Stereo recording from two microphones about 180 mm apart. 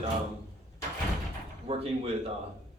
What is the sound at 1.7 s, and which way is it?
Speech, 35° right (ahead or behind).